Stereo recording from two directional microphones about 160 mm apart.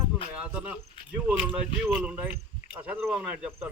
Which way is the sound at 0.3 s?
10° right (ahead or behind).